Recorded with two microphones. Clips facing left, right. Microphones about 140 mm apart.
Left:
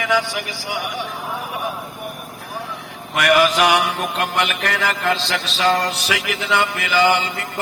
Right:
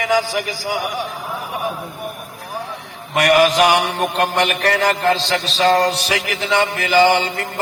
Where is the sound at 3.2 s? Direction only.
40° right (ahead or behind).